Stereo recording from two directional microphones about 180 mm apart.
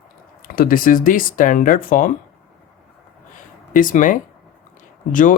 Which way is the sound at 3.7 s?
45° left (ahead or behind).